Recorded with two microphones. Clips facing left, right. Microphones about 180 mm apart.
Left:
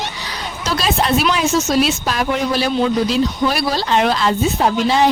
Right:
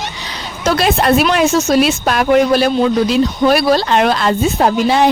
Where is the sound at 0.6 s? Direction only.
55° right (ahead or behind).